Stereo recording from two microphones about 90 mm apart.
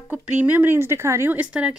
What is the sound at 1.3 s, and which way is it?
Speech, 15° right (ahead or behind).